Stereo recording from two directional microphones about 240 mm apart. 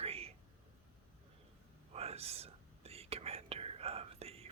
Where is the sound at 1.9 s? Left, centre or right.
Right.